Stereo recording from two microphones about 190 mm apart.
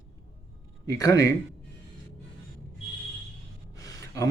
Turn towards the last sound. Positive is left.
turn(degrees=20)  # may be behind; listen again after turning